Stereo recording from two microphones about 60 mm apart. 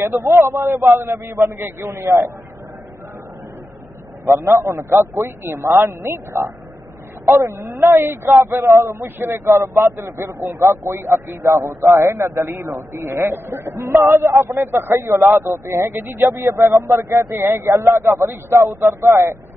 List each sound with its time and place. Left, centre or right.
0.0 s a man's voice: right
0.8 s a man's voice: right
1.6 s a man's voice: right
4.3 s a man's voice: right
13.5 s a man's voice: right
17.4 s a man's voice: right